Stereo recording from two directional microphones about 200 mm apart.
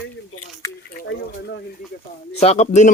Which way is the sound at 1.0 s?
60° left (ahead or behind).